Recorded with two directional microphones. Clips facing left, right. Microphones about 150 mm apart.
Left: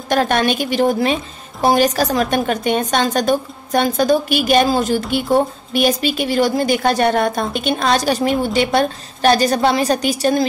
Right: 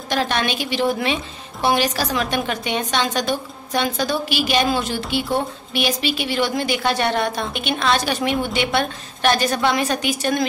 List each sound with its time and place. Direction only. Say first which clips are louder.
0.1 s a woman's voice: left 6 dB; 50° left (ahead or behind)